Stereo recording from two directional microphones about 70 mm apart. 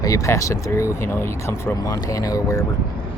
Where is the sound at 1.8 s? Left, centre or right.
Left.